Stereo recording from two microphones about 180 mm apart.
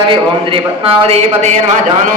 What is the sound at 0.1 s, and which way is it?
A man's voice, 30° right (ahead or behind).